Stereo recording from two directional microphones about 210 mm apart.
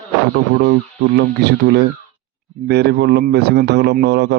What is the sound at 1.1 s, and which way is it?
A man's voice, 50° right (ahead or behind).